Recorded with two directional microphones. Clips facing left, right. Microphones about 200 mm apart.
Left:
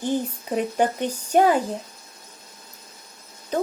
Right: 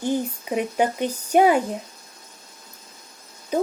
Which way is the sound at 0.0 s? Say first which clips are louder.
Right 1 dB; 10° right (ahead or behind).